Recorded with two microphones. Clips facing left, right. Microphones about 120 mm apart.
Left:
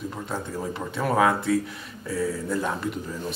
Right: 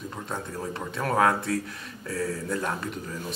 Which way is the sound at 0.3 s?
5° left (ahead or behind).